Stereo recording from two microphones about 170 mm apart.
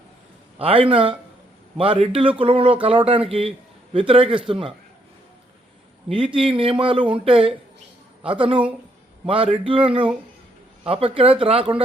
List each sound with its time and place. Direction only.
0.6 s a man's voice: 30° right (ahead or behind)
6.1 s a man's voice: 30° right (ahead or behind)